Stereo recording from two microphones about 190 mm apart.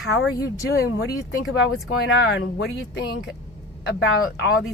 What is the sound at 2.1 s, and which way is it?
Speech, 70° left (ahead or behind).